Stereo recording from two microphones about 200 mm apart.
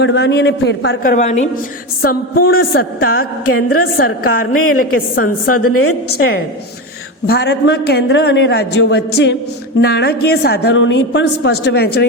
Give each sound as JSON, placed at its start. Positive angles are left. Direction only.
{"t": 0.0, "sound": "a woman's voice", "side_deg": 60}
{"t": 1.1, "sound": "a woman's voice", "side_deg": 35}
{"t": 2.0, "sound": "a woman's voice", "side_deg": 50}
{"t": 3.4, "sound": "a woman's voice", "side_deg": 90}
{"t": 4.8, "sound": "a woman's voice", "side_deg": 45}
{"t": 5.5, "sound": "a woman's voice", "side_deg": 90}
{"t": 7.3, "sound": "a woman's voice", "side_deg": 55}